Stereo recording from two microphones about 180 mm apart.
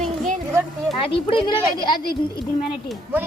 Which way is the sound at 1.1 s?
30° left (ahead or behind).